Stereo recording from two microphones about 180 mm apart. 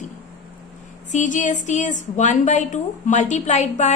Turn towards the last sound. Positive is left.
turn(degrees=40)  # may be behind; listen again after turning